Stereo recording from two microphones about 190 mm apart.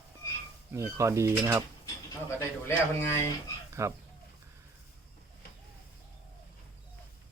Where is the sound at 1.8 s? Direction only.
15° left (ahead or behind).